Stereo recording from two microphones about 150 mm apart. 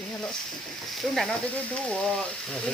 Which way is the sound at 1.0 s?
Centre (ahead or behind).